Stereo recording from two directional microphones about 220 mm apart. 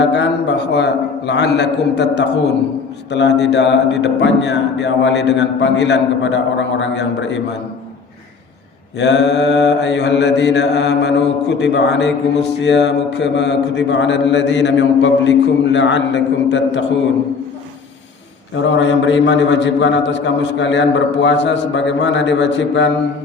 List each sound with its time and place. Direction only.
0.0 s mantra: 50° left (ahead or behind)
9.0 s mantra: 50° left (ahead or behind)
18.5 s a man's voice: 55° left (ahead or behind)